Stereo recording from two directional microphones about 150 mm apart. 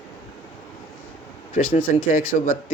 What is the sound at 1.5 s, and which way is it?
Speech, 60° left (ahead or behind).